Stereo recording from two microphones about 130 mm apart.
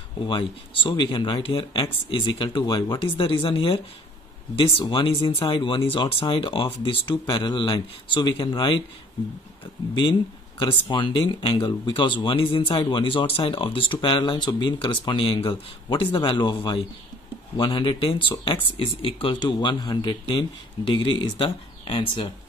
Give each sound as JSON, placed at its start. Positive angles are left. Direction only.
{"t": 0.3, "sound": "speech", "side_deg": 40}
{"t": 10.6, "sound": "speech", "side_deg": 35}